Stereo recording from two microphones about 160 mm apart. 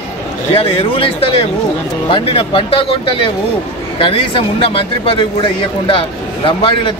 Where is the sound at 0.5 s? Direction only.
35° left (ahead or behind).